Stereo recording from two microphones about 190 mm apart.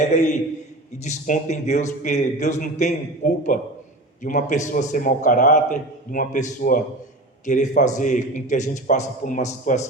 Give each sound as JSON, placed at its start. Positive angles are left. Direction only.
{"t": 0.0, "sound": "a man's voice", "side_deg": 40}